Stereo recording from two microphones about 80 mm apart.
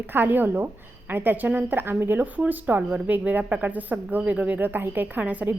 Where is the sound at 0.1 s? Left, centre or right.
Right.